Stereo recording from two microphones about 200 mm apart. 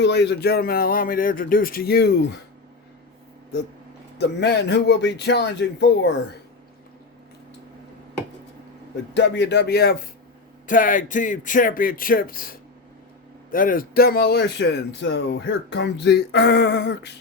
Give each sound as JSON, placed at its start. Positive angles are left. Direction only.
{"t": 0.0, "sound": "speech", "side_deg": 60}
{"t": 4.2, "sound": "a man's voice", "side_deg": 55}
{"t": 9.1, "sound": "a man's voice", "side_deg": 60}
{"t": 10.7, "sound": "a man's voice", "side_deg": 40}